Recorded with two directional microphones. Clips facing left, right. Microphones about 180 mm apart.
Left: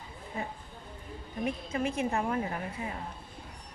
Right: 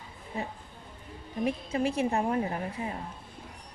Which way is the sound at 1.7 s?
35° right (ahead or behind).